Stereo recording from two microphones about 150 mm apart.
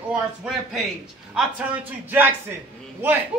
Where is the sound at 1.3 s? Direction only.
10° right (ahead or behind).